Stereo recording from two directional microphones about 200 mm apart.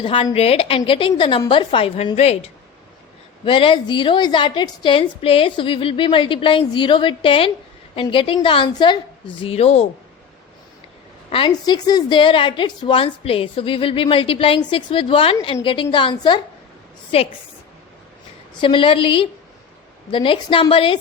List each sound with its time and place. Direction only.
0.0 s a woman's voice: 25° left (ahead or behind)
11.3 s a woman's voice: 25° left (ahead or behind)
18.6 s a woman's voice: 25° left (ahead or behind)